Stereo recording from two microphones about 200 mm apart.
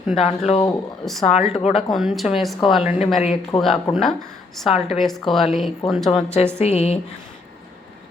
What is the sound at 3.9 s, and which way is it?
Speech, centre (ahead or behind).